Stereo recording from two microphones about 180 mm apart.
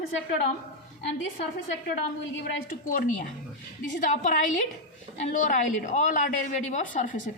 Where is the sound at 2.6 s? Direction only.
50° left (ahead or behind).